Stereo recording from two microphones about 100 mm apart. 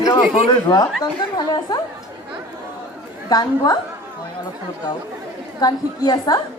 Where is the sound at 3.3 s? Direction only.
40° left (ahead or behind).